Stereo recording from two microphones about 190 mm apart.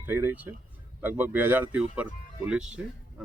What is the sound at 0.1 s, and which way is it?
Speech, 10° right (ahead or behind).